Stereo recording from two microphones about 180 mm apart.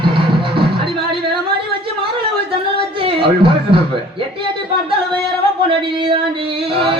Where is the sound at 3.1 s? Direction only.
30° right (ahead or behind).